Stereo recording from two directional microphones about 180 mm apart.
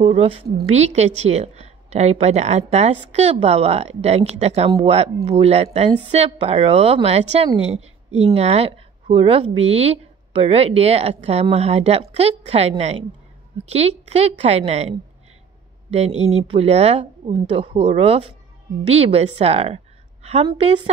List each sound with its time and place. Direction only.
0.0 s a woman's voice: 35° right (ahead or behind)